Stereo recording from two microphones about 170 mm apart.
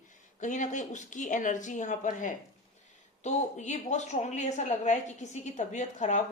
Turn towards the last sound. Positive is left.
turn(degrees=45)  # may be behind; listen again after turning